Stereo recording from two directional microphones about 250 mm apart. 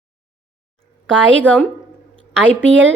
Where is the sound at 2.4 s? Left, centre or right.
Right.